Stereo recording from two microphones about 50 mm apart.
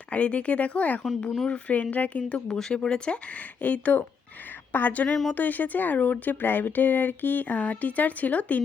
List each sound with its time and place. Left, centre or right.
0.1 s speech: left
2.5 s speech: centre
3.6 s speech: left